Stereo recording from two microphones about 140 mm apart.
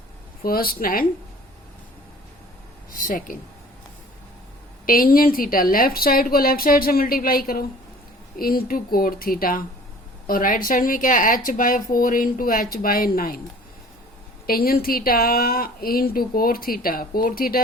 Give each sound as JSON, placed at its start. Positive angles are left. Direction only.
{"t": 0.4, "sound": "speech", "side_deg": 90}
{"t": 2.9, "sound": "speech", "side_deg": 75}
{"t": 4.9, "sound": "speech", "side_deg": 90}
{"t": 10.2, "sound": "speech", "side_deg": 80}
{"t": 14.4, "sound": "speech", "side_deg": 90}